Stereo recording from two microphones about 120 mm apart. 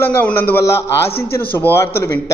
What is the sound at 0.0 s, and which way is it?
A man's voice, 20° left (ahead or behind).